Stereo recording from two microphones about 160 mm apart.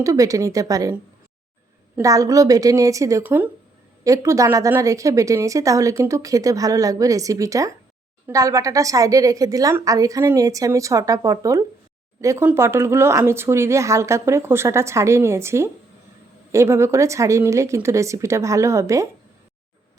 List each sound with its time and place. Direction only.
0.0 s a woman's voice: 20° right (ahead or behind)
2.0 s a woman's voice: 20° right (ahead or behind)